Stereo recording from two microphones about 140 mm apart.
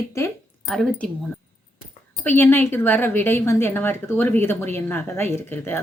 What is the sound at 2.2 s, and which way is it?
A woman's voice, 15° left (ahead or behind).